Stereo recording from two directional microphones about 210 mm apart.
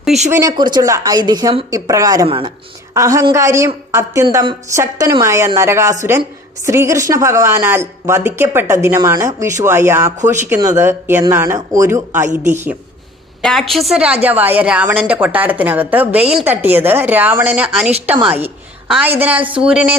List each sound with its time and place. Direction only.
0.0 s speech: centre (ahead or behind)
0.3 s a woman's voice: 20° right (ahead or behind)
13.4 s a woman's voice: centre (ahead or behind)